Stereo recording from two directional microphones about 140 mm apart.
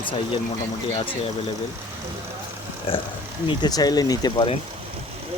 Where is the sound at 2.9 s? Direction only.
40° left (ahead or behind).